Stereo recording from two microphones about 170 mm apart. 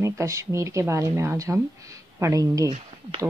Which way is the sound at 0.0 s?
15° right (ahead or behind).